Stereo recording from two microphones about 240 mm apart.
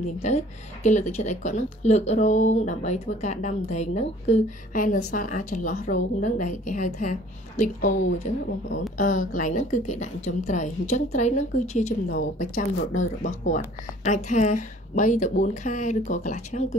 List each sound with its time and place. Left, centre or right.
0.8 s a woman's voice: left